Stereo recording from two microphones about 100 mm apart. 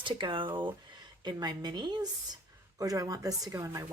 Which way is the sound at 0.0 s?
55° right (ahead or behind).